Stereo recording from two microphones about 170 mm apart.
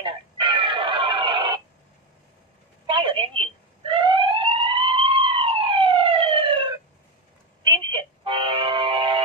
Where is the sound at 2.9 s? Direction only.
30° right (ahead or behind).